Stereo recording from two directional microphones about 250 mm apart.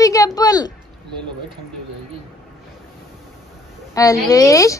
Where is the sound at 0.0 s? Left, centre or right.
Centre.